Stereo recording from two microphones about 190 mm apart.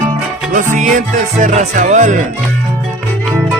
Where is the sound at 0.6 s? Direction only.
40° right (ahead or behind).